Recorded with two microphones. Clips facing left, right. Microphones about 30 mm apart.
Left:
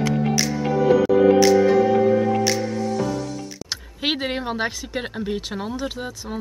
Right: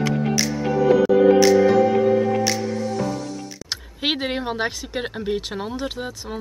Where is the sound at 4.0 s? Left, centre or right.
Centre.